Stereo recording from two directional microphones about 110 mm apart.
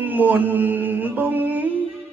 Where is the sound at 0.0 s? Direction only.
15° right (ahead or behind).